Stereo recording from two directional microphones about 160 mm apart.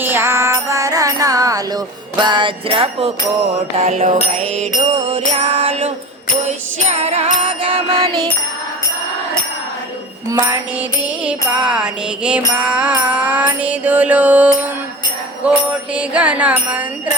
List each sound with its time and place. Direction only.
0.0 s music: 15° right (ahead or behind); by 4.6 s 50° right (ahead or behind)
4.9 s music: 35° right (ahead or behind)
7.9 s music: 25° right (ahead or behind)
10.2 s music: 20° right (ahead or behind)
11.3 s music: 5° right (ahead or behind)
16.0 s music: 10° right (ahead or behind)